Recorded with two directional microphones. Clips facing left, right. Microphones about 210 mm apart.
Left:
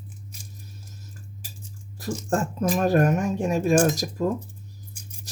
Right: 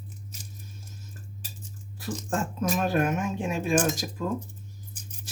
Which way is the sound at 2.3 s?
40° left (ahead or behind).